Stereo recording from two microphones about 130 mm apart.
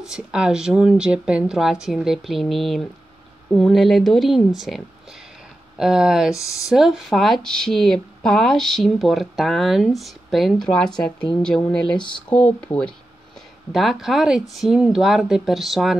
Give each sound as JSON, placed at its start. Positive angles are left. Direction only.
{"t": 0.0, "sound": "speech", "side_deg": -5}
{"t": 6.3, "sound": "speech", "side_deg": 25}
{"t": 6.7, "sound": "speech", "side_deg": 0}
{"t": 13.7, "sound": "speech", "side_deg": 0}